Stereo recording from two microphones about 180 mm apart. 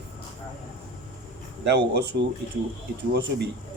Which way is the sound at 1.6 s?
65° right (ahead or behind).